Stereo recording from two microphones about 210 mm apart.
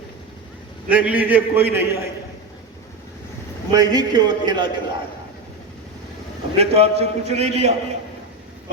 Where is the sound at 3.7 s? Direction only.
20° right (ahead or behind).